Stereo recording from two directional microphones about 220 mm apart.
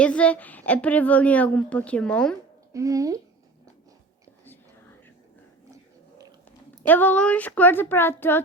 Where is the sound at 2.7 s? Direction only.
15° right (ahead or behind).